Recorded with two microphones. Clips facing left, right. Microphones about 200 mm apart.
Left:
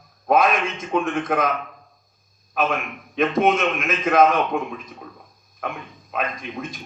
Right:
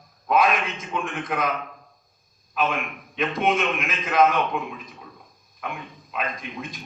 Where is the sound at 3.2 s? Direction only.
50° left (ahead or behind).